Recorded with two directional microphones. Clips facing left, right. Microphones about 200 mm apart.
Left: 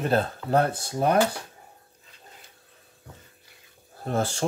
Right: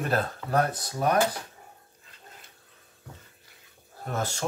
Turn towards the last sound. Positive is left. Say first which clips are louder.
# left 5 dB
turn(degrees=30)  # may be behind; listen again after turning